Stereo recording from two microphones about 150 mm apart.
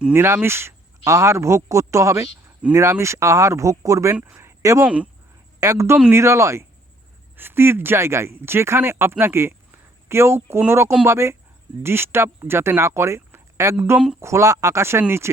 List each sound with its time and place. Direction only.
0.0 s a woman's voice: 15° right (ahead or behind)